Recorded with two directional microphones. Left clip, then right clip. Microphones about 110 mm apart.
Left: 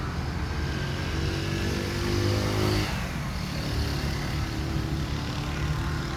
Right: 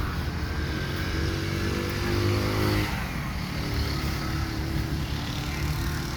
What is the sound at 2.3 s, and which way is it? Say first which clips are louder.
Vehicle: right 1 dB; 25° left (ahead or behind).